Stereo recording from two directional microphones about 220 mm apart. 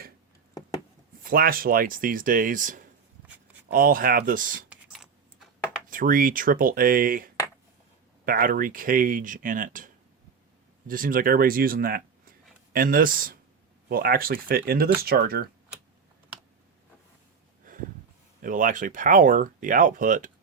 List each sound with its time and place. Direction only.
1.2 s speech: 40° right (ahead or behind)
4.7 s typing: centre (ahead or behind)
5.9 s speech: 40° right (ahead or behind)
18.4 s speech: 35° right (ahead or behind)